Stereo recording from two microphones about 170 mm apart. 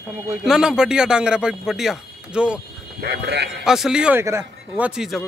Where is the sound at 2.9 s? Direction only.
85° right.